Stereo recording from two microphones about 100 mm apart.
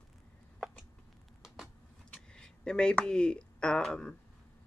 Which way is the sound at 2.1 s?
10° left (ahead or behind).